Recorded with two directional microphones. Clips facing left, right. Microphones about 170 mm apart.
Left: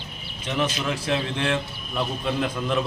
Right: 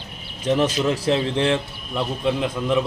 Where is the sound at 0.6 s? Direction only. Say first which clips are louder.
Right 6 dB; 40° right (ahead or behind).